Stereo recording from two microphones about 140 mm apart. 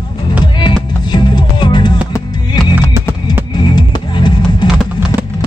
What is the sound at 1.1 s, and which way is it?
Music, 30° left (ahead or behind).